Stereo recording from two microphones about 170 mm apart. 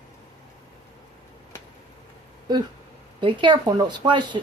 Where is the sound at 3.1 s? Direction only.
30° right (ahead or behind).